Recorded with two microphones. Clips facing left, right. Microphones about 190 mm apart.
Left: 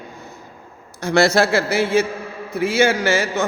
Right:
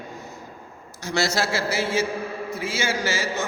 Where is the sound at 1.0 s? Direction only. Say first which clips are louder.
Left 9 dB; 60° left (ahead or behind).